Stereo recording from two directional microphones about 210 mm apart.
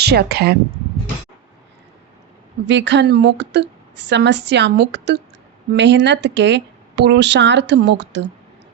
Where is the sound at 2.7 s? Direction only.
60° right (ahead or behind).